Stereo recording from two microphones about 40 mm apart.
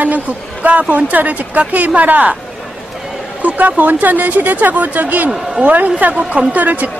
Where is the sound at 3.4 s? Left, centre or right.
Right.